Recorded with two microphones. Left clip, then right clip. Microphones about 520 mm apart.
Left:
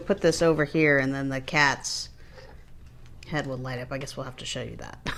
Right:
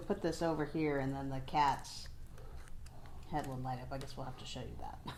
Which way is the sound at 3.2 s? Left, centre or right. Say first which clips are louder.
Left 9 dB; left.